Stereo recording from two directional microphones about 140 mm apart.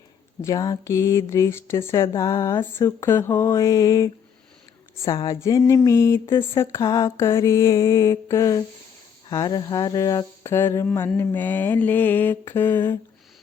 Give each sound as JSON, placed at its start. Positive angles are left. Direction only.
{"t": 0.4, "sound": "speech", "side_deg": 25}
{"t": 5.1, "sound": "speech", "side_deg": 25}
{"t": 11.2, "sound": "mantra", "side_deg": 15}